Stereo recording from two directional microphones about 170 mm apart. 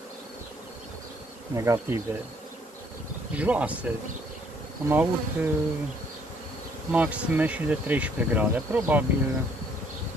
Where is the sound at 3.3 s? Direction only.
10° right (ahead or behind).